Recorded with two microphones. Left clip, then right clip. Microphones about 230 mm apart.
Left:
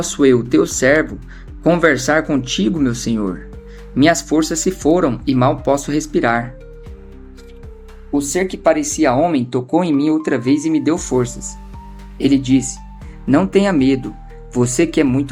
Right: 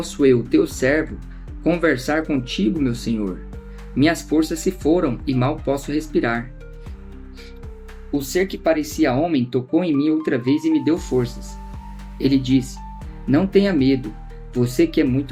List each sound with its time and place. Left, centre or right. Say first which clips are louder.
0.1 s speech: left 3 dB; left
8.1 s speech: left 3 dB; left